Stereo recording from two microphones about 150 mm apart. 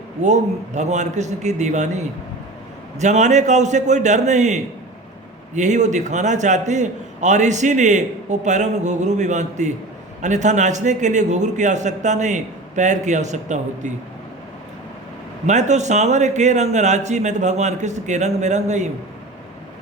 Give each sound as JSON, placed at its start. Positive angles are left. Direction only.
{"t": 0.2, "sound": "a man's voice", "side_deg": -50}
{"t": 3.0, "sound": "a man's voice", "side_deg": -50}
{"t": 15.4, "sound": "a man's voice", "side_deg": -50}